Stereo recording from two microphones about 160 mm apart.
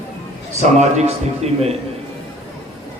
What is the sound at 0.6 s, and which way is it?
Speech, 45° right (ahead or behind).